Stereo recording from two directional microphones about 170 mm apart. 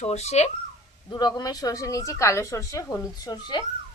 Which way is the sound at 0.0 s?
40° left (ahead or behind).